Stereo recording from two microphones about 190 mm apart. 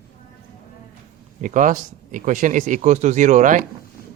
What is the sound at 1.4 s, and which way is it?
Speech, 45° right (ahead or behind).